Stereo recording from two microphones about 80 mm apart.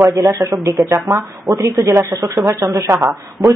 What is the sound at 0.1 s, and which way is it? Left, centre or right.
Speech, right.